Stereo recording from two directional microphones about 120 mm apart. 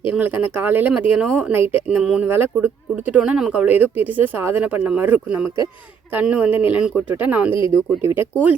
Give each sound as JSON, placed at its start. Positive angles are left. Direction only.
{"t": 0.1, "sound": "speech", "side_deg": -15}
{"t": 2.0, "sound": "speech", "side_deg": -5}
{"t": 2.2, "sound": "speech", "side_deg": -15}
{"t": 3.1, "sound": "speech", "side_deg": -5}